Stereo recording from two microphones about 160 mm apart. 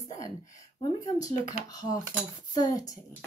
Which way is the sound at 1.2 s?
25° left (ahead or behind).